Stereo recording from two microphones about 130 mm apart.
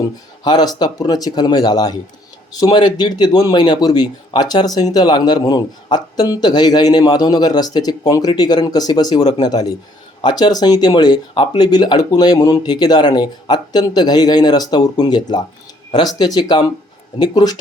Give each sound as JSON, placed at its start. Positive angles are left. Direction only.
{"t": 0.4, "sound": "a man's voice", "side_deg": 30}